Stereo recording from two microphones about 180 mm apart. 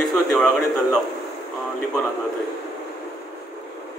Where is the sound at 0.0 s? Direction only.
Centre (ahead or behind).